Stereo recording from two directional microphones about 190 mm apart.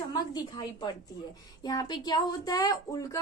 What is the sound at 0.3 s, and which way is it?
A woman's voice, 20° left (ahead or behind).